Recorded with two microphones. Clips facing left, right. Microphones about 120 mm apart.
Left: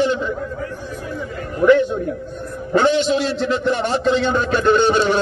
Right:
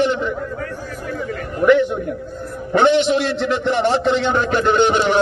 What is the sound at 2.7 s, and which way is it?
A man's voice, 25° right (ahead or behind).